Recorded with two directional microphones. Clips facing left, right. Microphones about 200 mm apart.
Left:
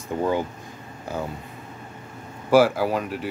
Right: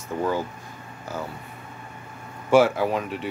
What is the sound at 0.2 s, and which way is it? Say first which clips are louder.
Speech: left 2 dB; 20° left (ahead or behind).